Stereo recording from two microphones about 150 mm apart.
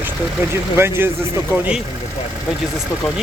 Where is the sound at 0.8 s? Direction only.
15° right (ahead or behind).